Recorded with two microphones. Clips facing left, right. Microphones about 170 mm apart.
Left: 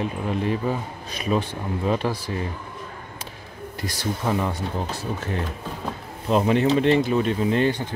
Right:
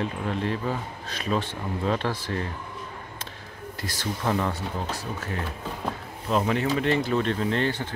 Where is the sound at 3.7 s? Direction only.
15° left (ahead or behind).